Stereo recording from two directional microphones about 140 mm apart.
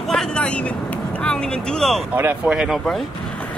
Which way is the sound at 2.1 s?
10° right (ahead or behind).